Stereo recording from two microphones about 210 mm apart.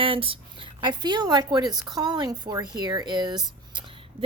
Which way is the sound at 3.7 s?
20° right (ahead or behind).